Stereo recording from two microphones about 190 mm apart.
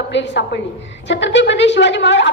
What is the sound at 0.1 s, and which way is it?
A woman's voice, 65° left (ahead or behind).